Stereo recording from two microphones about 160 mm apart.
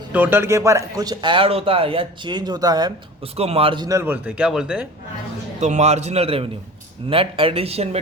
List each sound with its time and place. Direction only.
0.1 s a man's voice: 10° right (ahead or behind)
3.3 s speech: 40° right (ahead or behind)
3.8 s speech: 15° right (ahead or behind)
5.5 s a man's voice: 45° right (ahead or behind)